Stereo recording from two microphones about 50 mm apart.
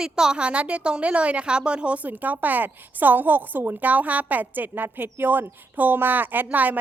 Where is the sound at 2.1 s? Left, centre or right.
Right.